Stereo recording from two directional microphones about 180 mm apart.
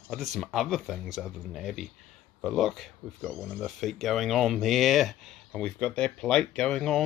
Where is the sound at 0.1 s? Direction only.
Centre (ahead or behind).